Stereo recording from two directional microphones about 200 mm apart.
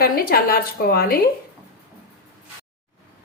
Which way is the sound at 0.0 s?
50° left (ahead or behind).